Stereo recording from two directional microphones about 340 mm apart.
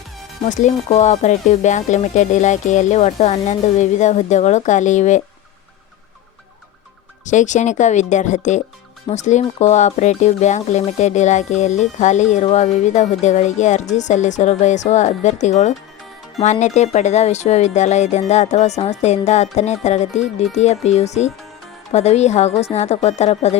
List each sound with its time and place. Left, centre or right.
0.4 s speech: left
7.3 s speech: left